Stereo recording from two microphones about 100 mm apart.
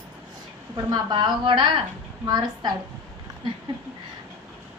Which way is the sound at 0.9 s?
45° right (ahead or behind).